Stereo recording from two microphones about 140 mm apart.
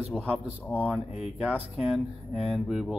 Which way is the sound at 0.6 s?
10° left (ahead or behind).